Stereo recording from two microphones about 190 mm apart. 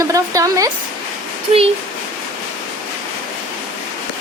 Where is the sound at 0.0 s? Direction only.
15° right (ahead or behind).